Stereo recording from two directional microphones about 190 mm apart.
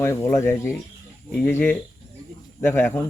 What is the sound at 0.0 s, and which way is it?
Speech, 15° left (ahead or behind).